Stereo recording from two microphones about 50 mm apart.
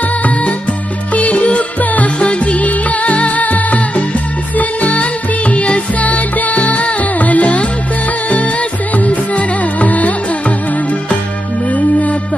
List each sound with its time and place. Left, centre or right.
1.1 s music: left
8.9 s music: left
11.7 s music: left